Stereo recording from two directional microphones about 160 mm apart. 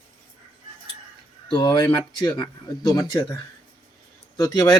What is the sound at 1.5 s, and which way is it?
Speech, 30° left (ahead or behind).